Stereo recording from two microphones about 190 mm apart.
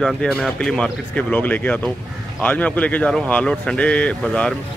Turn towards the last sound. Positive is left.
turn(degrees=5)  # may be behind; listen again after turning